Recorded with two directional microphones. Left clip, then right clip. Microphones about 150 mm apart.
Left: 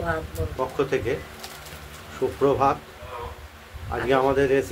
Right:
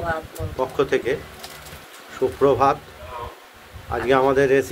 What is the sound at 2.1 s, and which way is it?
Speech, 15° right (ahead or behind).